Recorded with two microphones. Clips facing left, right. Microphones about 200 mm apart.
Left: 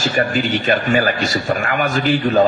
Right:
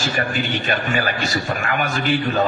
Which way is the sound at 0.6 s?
45° left (ahead or behind).